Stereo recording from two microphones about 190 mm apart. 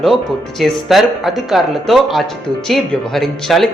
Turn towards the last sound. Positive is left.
turn(degrees=0)  # may be behind; listen again after turning